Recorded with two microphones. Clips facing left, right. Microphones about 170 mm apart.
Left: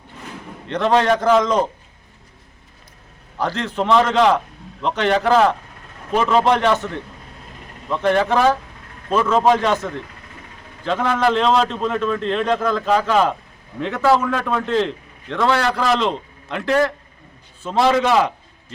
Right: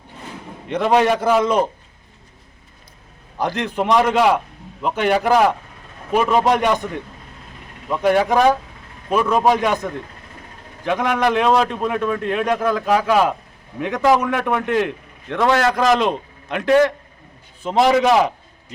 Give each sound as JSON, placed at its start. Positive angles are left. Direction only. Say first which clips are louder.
{"t": 0.7, "sound": "a man's voice", "louder": "even", "side_deg": -10}
{"t": 3.3, "sound": "a man's voice", "louder": "right 1 dB", "side_deg": -15}